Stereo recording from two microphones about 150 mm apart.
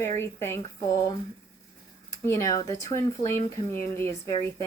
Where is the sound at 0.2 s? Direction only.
15° left (ahead or behind).